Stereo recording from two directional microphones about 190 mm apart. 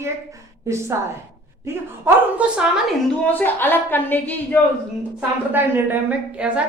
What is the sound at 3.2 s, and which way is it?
A woman's voice, 10° left (ahead or behind).